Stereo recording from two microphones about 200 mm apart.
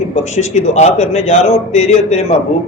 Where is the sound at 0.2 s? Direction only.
35° left (ahead or behind).